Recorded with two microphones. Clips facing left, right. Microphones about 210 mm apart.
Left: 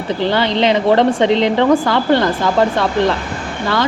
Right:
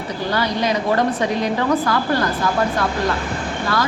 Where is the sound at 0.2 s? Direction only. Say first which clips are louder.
Left 5 dB; 85° left.